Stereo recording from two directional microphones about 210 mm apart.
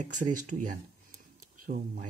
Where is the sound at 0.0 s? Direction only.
35° right (ahead or behind).